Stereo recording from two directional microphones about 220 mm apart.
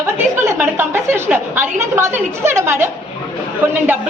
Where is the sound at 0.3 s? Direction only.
10° right (ahead or behind).